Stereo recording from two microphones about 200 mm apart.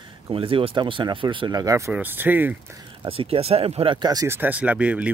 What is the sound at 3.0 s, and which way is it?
Speech, 25° right (ahead or behind).